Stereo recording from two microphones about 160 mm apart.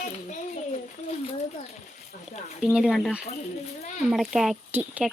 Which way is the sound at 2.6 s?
5° right (ahead or behind).